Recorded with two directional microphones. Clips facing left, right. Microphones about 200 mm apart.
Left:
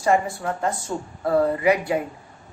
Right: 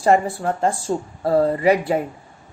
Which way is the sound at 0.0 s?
35° right (ahead or behind).